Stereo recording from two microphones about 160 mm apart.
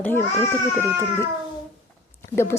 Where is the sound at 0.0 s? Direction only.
15° left (ahead or behind).